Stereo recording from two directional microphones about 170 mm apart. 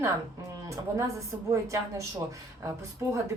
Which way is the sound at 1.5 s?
15° right (ahead or behind).